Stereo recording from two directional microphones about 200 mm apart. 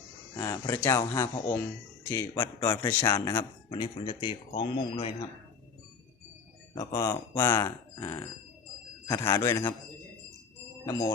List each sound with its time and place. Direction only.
0.3 s speech: 15° left (ahead or behind)
6.9 s speech: 15° left (ahead or behind)